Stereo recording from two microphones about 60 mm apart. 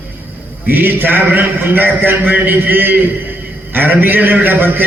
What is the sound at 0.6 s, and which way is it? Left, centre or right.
A man's voice, right.